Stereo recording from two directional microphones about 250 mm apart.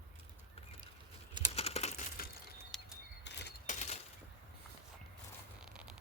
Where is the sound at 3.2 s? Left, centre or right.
Left.